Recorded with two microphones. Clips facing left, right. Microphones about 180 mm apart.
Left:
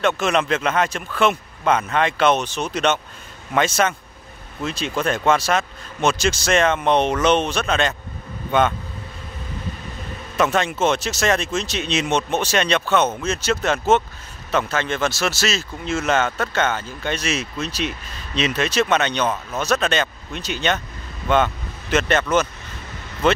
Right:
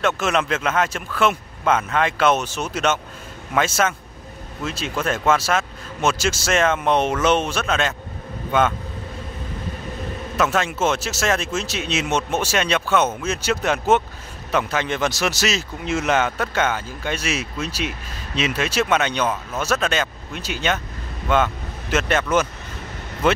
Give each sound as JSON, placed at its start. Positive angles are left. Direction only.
{"t": 0.0, "sound": "a man's voice", "side_deg": -5}
{"t": 10.3, "sound": "a man's voice", "side_deg": 0}